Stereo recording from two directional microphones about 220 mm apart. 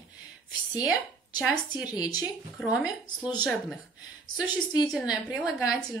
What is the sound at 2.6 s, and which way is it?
Speech, 5° right (ahead or behind).